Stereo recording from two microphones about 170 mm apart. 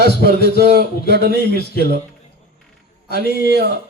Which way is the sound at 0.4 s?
70° right (ahead or behind).